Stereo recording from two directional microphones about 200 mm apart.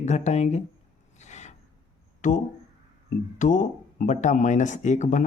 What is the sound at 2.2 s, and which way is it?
Speech, 40° left (ahead or behind).